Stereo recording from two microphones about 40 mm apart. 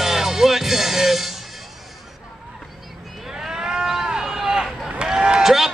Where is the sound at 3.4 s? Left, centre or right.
Right.